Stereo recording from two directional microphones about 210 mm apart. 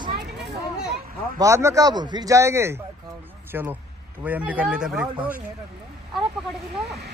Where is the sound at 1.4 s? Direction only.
15° right (ahead or behind).